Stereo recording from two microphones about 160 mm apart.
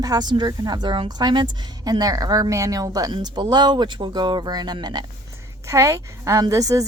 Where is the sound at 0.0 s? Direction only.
25° right (ahead or behind).